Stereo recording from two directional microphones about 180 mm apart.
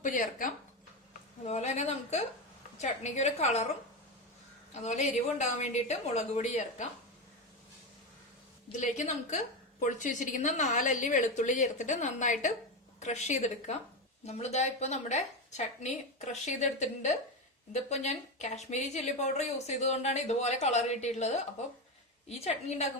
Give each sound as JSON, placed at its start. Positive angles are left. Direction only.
{"t": 0.0, "sound": "a sound", "side_deg": 45}
{"t": 2.8, "sound": "a woman's voice", "side_deg": 40}
{"t": 4.7, "sound": "a woman's voice", "side_deg": 40}
{"t": 8.8, "sound": "a woman's voice", "side_deg": 40}